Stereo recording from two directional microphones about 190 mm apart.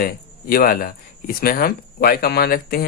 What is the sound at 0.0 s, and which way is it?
Speech, 50° left (ahead or behind).